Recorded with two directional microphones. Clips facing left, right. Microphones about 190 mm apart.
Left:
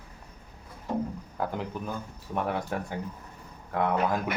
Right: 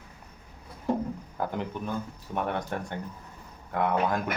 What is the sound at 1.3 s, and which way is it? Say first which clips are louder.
Speech: even; centre (ahead or behind).